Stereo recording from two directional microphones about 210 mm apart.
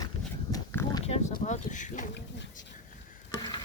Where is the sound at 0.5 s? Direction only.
15° left (ahead or behind).